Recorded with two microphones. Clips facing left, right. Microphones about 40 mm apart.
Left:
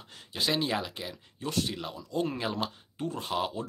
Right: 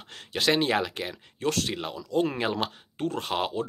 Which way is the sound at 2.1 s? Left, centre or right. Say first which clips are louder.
Right 5 dB; right.